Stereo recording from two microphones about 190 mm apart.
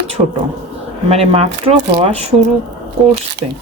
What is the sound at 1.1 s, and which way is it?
Speech, 30° right (ahead or behind).